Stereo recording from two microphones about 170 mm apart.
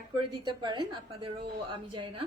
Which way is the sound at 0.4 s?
25° right (ahead or behind).